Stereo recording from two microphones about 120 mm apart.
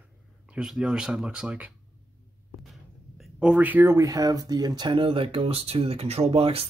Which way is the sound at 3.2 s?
10° right (ahead or behind).